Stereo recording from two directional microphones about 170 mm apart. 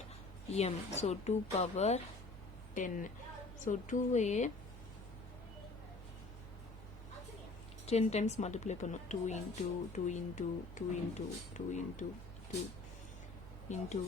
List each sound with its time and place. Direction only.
0.5 s a woman's voice: 40° left (ahead or behind)
7.9 s speech: 40° left (ahead or behind)
13.7 s speech: 45° left (ahead or behind)